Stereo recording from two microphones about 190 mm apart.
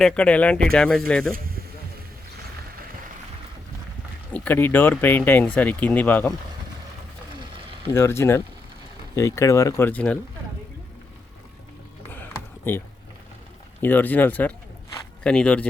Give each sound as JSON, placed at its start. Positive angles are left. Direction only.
{"t": 0.0, "sound": "speech", "side_deg": 5}
{"t": 4.3, "sound": "speech", "side_deg": 10}
{"t": 7.9, "sound": "speech", "side_deg": 15}
{"t": 12.1, "sound": "a sound", "side_deg": 10}
{"t": 13.8, "sound": "speech", "side_deg": 10}